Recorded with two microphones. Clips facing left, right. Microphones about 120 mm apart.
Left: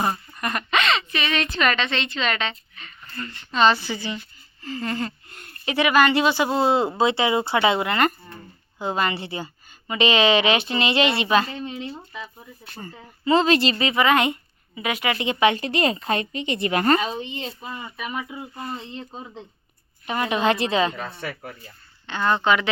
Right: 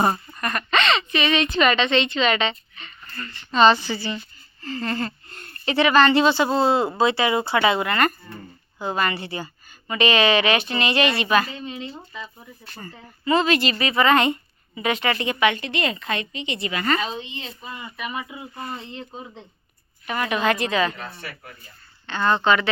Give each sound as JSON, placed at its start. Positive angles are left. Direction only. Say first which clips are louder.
{"t": 0.3, "sound": "a sound", "louder": "right 1 dB", "side_deg": 15}
{"t": 0.8, "sound": "a woman's voice", "louder": "right 3 dB", "side_deg": 0}
{"t": 3.2, "sound": "a woman's voice", "louder": "left 3 dB", "side_deg": 20}
{"t": 3.5, "sound": "a woman's voice", "louder": "right 3 dB", "side_deg": 0}
{"t": 12.8, "sound": "a woman's voice", "louder": "left 2 dB", "side_deg": 25}
{"t": 13.9, "sound": "a woman's voice", "louder": "right 3 dB", "side_deg": 10}
{"t": 15.3, "sound": "a woman's voice", "louder": "left 5 dB", "side_deg": 30}
{"t": 17.9, "sound": "a woman's voice", "louder": "right 1 dB", "side_deg": 0}
{"t": 20.1, "sound": "a woman's voice", "louder": "left 1 dB", "side_deg": 25}
{"t": 22.0, "sound": "a woman's voice", "louder": "right 1 dB", "side_deg": 10}